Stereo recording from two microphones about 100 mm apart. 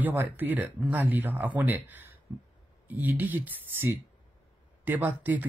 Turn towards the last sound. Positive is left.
turn(degrees=-15)  # may be behind; listen again after turning